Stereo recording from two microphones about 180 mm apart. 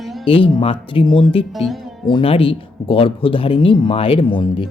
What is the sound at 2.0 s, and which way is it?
A man's voice, 30° left (ahead or behind).